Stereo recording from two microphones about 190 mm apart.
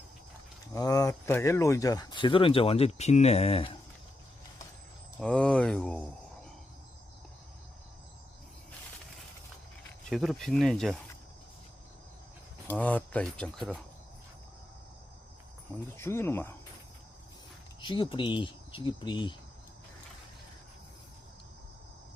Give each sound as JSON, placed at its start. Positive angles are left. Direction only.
{"t": 0.7, "sound": "speech", "side_deg": 15}
{"t": 5.2, "sound": "speech", "side_deg": 5}
{"t": 10.1, "sound": "speech", "side_deg": 0}
{"t": 12.6, "sound": "speech", "side_deg": 10}
{"t": 16.0, "sound": "speech", "side_deg": 15}
{"t": 17.7, "sound": "speech", "side_deg": 25}